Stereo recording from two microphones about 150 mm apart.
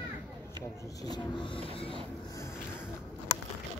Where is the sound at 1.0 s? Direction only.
30° left (ahead or behind).